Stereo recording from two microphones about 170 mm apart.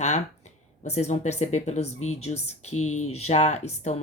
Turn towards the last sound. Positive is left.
turn(degrees=40)  # may be behind; listen again after turning